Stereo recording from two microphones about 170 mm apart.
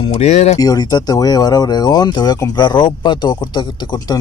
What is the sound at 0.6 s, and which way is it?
Speech, 25° left (ahead or behind).